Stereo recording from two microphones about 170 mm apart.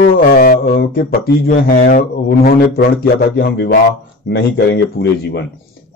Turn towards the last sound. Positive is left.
turn(degrees=90)